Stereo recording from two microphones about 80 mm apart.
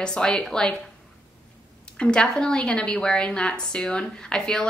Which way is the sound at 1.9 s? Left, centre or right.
Centre.